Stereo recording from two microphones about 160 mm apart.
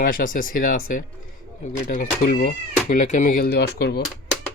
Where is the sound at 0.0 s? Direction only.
60° left (ahead or behind); by 4.0 s 80° left.